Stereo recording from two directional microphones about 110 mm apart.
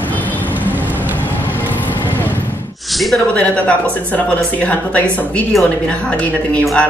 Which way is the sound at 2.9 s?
Centre (ahead or behind).